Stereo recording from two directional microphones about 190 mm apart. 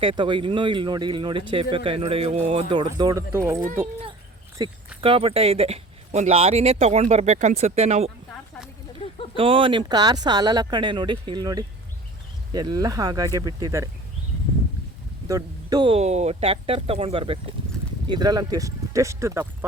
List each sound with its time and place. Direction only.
0.0 s speech: 25° right (ahead or behind)
4.6 s speech: 20° right (ahead or behind)
9.3 s speech: 30° right (ahead or behind)
15.3 s speech: 20° right (ahead or behind)